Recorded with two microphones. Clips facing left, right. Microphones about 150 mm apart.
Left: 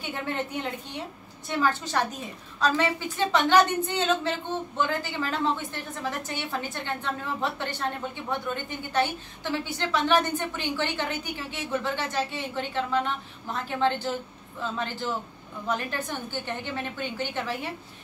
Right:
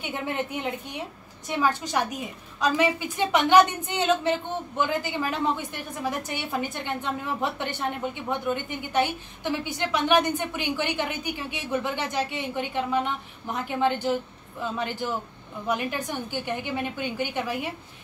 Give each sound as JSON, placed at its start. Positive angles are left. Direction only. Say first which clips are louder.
{"t": 0.1, "sound": "a woman's voice", "louder": "right 1 dB", "side_deg": -15}